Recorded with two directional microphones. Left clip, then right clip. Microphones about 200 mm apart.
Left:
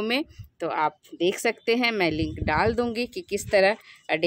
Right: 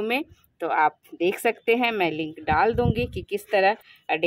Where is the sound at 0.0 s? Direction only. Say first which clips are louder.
Right 1 dB; 15° left (ahead or behind).